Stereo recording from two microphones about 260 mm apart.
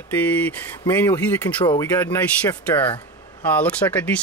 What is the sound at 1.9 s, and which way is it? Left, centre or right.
Speech, centre.